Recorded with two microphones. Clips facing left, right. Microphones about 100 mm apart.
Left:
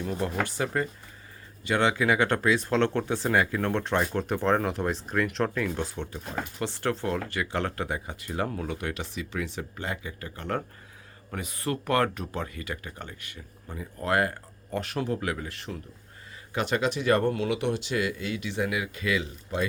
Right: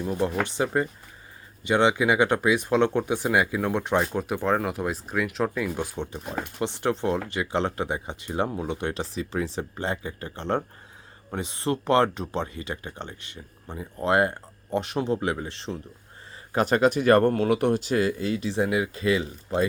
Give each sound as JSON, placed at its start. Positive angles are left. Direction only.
{"t": 0.0, "sound": "speech", "side_deg": -20}
{"t": 16.5, "sound": "speech", "side_deg": -40}